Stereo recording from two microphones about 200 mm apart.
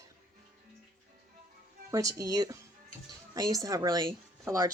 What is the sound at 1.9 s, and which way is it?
A woman's voice, 15° right (ahead or behind).